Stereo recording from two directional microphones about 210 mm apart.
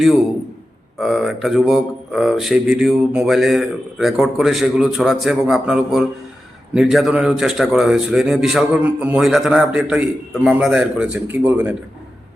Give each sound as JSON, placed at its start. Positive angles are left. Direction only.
{"t": 0.9, "sound": "speech", "side_deg": 0}